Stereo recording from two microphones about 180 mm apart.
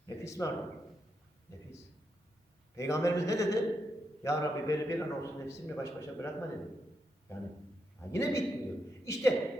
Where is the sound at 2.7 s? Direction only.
15° left (ahead or behind).